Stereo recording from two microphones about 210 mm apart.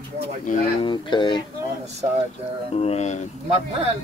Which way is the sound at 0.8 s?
20° left (ahead or behind).